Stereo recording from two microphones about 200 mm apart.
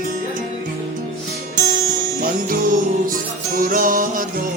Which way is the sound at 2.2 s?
45° right (ahead or behind).